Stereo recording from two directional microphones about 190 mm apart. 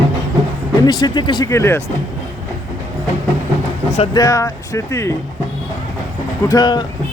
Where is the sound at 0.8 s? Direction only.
20° left (ahead or behind).